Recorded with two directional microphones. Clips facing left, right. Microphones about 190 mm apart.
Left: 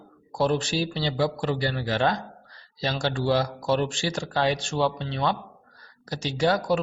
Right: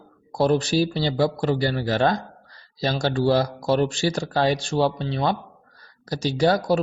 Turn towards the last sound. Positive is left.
turn(degrees=-35)  # may be behind; listen again after turning